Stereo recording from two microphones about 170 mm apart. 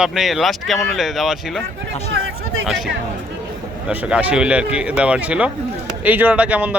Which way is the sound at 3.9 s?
10° right (ahead or behind).